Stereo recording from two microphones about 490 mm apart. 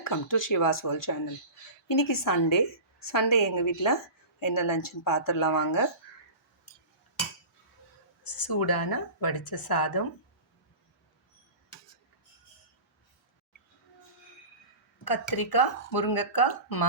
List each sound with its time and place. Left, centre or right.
0.0 s a woman's voice: left
8.2 s speech: left
15.0 s speech: left